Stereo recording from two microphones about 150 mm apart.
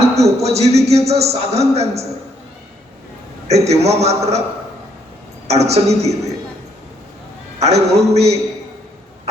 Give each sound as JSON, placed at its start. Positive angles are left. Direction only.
{"t": 0.0, "sound": "a man's voice", "side_deg": -45}
{"t": 3.4, "sound": "a man's voice", "side_deg": -45}
{"t": 5.5, "sound": "a man's voice", "side_deg": -45}
{"t": 7.6, "sound": "a man's voice", "side_deg": -45}